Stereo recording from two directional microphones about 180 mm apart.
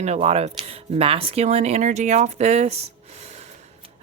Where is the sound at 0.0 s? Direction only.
35° right (ahead or behind).